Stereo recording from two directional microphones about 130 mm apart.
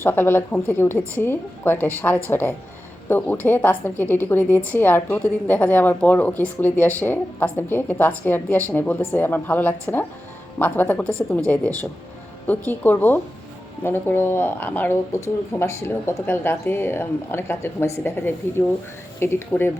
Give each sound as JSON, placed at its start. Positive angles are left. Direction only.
{"t": 0.0, "sound": "a woman's voice", "side_deg": 15}